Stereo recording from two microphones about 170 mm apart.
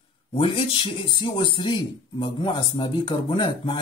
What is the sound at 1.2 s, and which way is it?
Speech, 30° left (ahead or behind).